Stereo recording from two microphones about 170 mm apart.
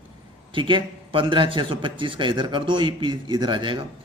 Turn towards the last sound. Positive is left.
turn(degrees=-25)  # may be behind; listen again after turning